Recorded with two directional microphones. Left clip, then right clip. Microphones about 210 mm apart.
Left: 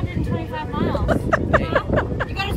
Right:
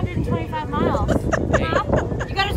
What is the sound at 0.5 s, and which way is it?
Vehicle, centre (ahead or behind).